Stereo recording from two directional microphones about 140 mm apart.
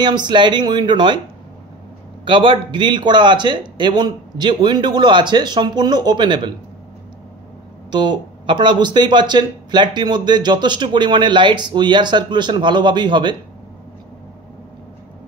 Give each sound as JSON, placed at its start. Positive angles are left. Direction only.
{"t": 0.0, "sound": "speech", "side_deg": -30}
{"t": 2.2, "sound": "speech", "side_deg": -35}
{"t": 7.9, "sound": "speech", "side_deg": -35}